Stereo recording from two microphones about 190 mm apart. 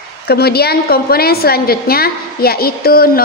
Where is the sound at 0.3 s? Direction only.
55° left (ahead or behind).